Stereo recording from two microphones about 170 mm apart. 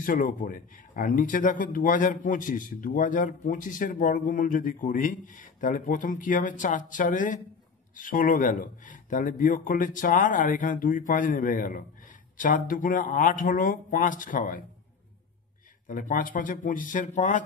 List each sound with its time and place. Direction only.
0.0 s speech: 55° left (ahead or behind)
15.9 s speech: 50° left (ahead or behind)